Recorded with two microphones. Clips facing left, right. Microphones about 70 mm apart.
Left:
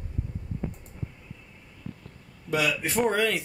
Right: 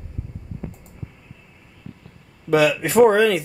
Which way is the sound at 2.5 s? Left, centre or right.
Right.